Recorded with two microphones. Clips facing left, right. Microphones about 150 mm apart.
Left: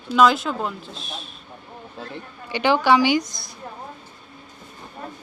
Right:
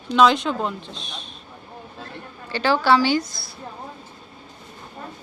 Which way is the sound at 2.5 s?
15° left (ahead or behind).